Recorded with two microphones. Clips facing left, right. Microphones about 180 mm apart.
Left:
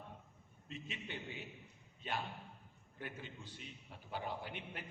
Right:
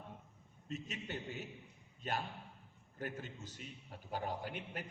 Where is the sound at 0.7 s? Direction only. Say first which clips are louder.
Right 4 dB; 45° right (ahead or behind).